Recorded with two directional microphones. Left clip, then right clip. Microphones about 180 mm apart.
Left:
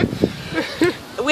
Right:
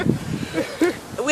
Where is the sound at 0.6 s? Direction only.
40° left (ahead or behind).